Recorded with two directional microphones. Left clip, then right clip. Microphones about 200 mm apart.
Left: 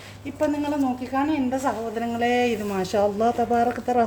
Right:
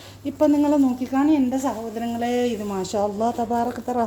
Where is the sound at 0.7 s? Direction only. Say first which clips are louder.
Right 4 dB; 35° right (ahead or behind).